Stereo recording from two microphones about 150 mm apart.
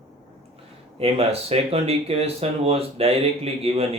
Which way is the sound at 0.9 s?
40° right (ahead or behind).